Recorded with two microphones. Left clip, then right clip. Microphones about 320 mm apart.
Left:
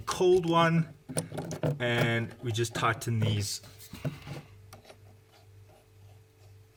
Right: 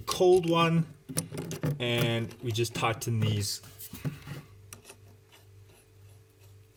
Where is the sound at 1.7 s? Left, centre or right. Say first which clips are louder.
Even; centre.